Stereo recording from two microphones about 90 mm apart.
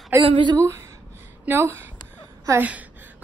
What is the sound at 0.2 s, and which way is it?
Speech, 65° right (ahead or behind).